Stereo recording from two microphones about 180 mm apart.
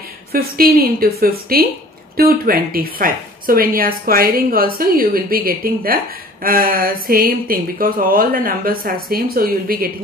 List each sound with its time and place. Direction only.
0.3 s a woman's voice: 55° right (ahead or behind)